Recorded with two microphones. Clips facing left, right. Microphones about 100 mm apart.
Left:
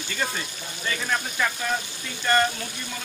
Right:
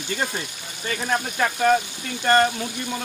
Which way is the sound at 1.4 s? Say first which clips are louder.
Right 7 dB; 40° right (ahead or behind).